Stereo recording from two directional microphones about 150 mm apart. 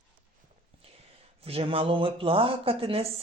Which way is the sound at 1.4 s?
40° right (ahead or behind).